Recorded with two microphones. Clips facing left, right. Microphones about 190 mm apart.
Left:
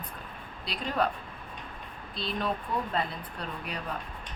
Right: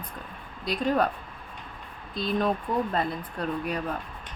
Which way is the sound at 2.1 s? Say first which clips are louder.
Right 6 dB; 45° right (ahead or behind).